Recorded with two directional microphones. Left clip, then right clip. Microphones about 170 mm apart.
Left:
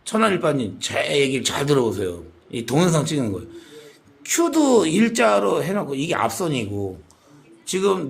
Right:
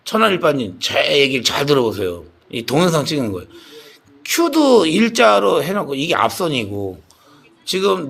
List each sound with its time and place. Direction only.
0.0 s speech: centre (ahead or behind)